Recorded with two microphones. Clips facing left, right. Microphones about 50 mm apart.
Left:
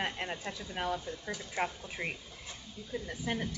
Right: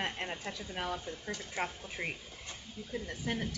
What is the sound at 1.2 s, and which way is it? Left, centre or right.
Speech, centre.